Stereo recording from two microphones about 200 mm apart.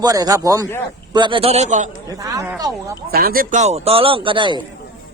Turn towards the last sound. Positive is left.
turn(degrees=-25)  # may be behind; listen again after turning